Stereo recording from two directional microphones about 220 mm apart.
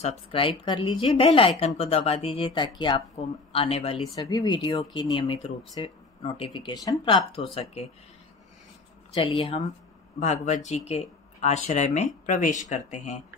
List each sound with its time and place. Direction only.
0.0 s speech: 25° left (ahead or behind)
9.1 s speech: 25° left (ahead or behind)